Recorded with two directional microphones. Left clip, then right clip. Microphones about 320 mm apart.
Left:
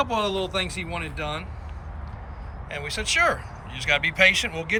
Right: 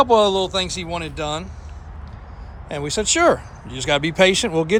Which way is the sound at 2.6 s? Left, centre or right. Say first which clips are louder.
Right 6 dB; centre.